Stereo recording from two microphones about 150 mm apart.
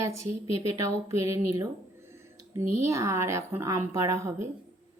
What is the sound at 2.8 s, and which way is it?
Speech, 20° right (ahead or behind).